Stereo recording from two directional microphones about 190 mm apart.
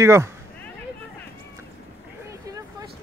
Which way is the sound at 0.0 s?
15° right (ahead or behind).